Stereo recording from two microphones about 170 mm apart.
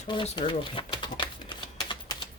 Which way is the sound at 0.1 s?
30° left (ahead or behind).